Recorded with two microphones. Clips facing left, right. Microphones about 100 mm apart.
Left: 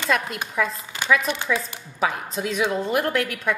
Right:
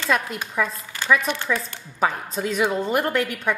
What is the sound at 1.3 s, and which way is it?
Speech, 15° left (ahead or behind).